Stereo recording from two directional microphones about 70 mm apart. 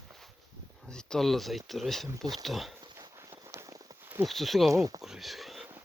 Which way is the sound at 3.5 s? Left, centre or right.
Right.